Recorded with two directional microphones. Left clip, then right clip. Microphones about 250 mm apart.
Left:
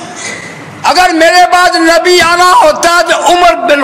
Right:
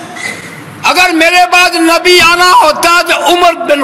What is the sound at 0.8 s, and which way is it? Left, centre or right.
A man's voice, right.